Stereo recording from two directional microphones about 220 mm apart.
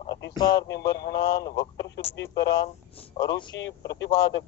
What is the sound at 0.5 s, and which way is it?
Speech, 50° left (ahead or behind).